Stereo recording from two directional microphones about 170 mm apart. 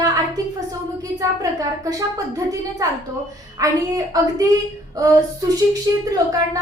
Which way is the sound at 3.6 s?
20° right (ahead or behind).